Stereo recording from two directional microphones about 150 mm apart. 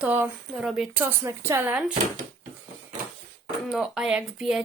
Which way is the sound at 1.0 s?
15° right (ahead or behind).